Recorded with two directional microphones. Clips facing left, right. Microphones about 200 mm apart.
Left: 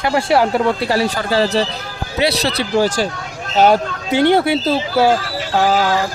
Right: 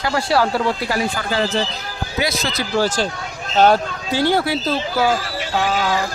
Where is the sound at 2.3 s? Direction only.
65° left (ahead or behind).